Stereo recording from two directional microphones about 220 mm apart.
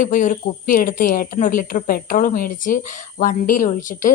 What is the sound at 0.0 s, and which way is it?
A woman's voice, 35° left (ahead or behind).